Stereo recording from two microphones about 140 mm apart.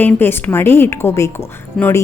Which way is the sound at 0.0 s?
15° left (ahead or behind).